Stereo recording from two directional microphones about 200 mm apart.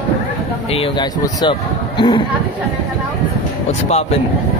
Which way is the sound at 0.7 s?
30° left (ahead or behind).